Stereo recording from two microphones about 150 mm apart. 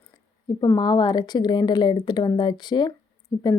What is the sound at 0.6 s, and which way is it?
Speech, 30° left (ahead or behind).